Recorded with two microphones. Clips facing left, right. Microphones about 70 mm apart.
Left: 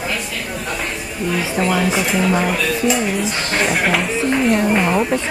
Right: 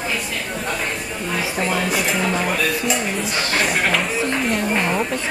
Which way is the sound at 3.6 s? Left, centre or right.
Centre.